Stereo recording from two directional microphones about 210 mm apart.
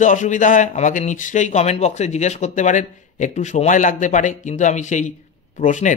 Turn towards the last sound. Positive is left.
turn(degrees=35)  # may be behind; listen again after turning